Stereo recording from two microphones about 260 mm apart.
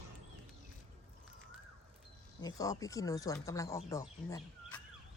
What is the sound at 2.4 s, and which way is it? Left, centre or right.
Speech, centre.